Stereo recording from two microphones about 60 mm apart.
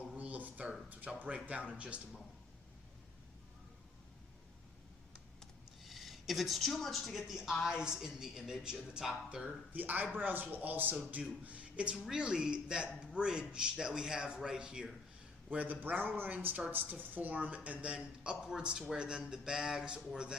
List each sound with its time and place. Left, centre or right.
0.2 s a sound: right
1.7 s a woman's voice: right
5.8 s a woman's voice: centre
9.4 s a woman's voice: right
11.9 s a man's voice: centre
15.4 s a woman's voice: right